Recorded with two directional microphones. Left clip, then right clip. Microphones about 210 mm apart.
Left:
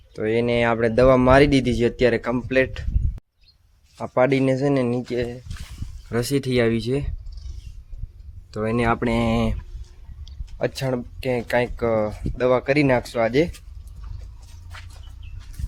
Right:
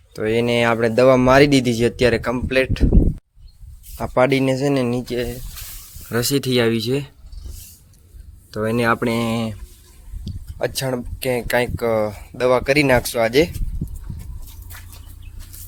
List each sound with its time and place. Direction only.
0.1 s speech: 10° right (ahead or behind)
3.9 s speech: 15° right (ahead or behind)
8.4 s speech: 10° right (ahead or behind)
10.2 s speech: 10° right (ahead or behind)